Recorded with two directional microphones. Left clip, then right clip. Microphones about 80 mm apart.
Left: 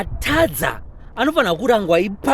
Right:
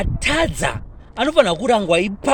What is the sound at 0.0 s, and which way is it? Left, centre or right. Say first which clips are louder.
A woman's voice: left 1 dB; left.